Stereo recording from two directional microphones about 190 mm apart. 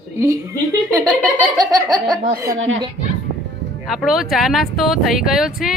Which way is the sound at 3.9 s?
Centre (ahead or behind).